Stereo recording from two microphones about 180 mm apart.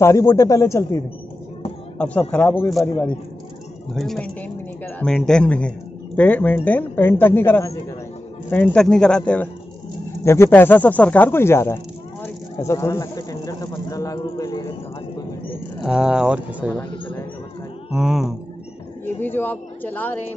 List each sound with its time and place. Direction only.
0.0 s a woman's voice: 15° left (ahead or behind)
3.9 s a woman's voice: centre (ahead or behind); by 14.7 s 20° left (ahead or behind)
15.8 s speech: 5° right (ahead or behind)
17.9 s speech: 5° right (ahead or behind)
19.2 s a woman's voice: 10° left (ahead or behind)